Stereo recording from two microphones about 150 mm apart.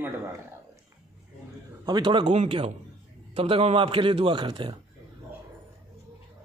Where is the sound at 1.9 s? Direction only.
30° right (ahead or behind).